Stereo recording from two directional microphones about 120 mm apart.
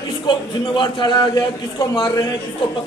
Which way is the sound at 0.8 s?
40° left (ahead or behind).